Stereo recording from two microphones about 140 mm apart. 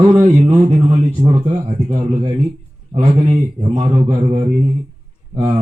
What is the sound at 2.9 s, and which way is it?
Speech, 50° right (ahead or behind).